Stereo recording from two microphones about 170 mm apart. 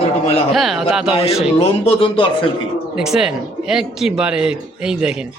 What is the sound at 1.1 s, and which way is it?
Speech, 35° left (ahead or behind).